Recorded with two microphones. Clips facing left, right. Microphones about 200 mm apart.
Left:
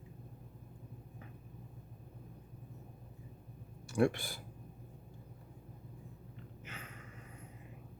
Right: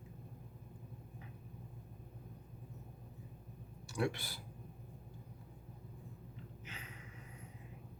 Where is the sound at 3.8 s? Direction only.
50° left (ahead or behind).